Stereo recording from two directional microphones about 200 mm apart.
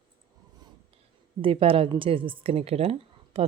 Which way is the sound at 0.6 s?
20° right (ahead or behind).